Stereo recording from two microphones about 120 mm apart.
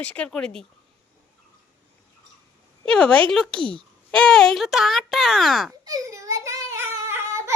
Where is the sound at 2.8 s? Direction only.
5° left (ahead or behind).